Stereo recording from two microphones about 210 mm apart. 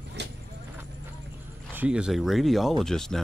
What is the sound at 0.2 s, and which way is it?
Vehicle, 55° right (ahead or behind).